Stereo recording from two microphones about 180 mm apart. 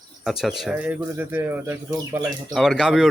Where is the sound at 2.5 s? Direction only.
Centre (ahead or behind).